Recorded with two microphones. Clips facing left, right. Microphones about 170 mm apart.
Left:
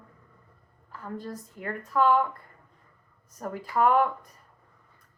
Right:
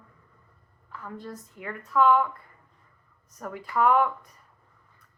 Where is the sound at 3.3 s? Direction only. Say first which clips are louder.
Left 1 dB; 40° left (ahead or behind).